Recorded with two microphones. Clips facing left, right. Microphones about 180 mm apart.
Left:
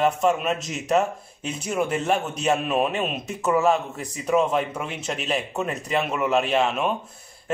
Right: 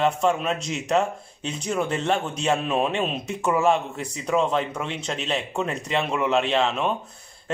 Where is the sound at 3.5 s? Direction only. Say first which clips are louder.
Left 1 dB; 25° right (ahead or behind).